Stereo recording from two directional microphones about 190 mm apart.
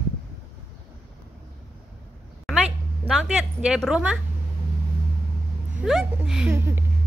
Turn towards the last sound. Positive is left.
turn(degrees=-10)  # may be behind; listen again after turning